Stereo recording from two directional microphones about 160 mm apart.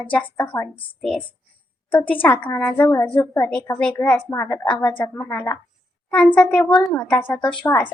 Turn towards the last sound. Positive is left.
turn(degrees=10)  # may be behind; listen again after turning